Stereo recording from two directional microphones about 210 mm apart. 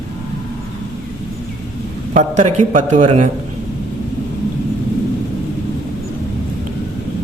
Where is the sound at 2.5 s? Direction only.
35° right (ahead or behind).